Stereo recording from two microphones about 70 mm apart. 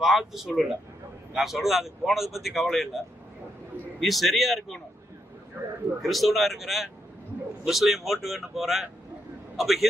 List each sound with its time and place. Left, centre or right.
0.0 s speech: centre
4.0 s speech: centre
5.6 s speech: right
6.0 s speech: centre